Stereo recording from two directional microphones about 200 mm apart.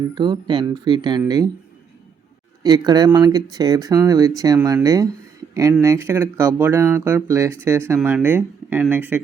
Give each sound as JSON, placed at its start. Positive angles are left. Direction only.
{"t": 0.1, "sound": "speech", "side_deg": -20}
{"t": 2.6, "sound": "speech", "side_deg": -20}